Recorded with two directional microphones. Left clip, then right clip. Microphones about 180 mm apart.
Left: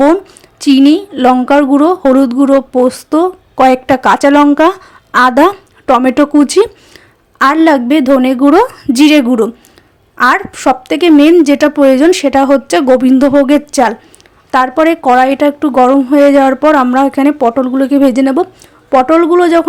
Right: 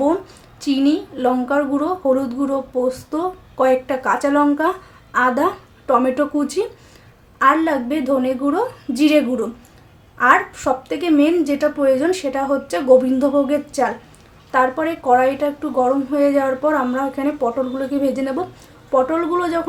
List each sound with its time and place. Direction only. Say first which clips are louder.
0.6 s a woman's voice: left 11 dB; 45° left (ahead or behind)